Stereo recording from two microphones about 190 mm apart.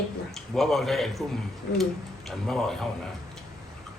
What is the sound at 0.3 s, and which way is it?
Speech, centre (ahead or behind).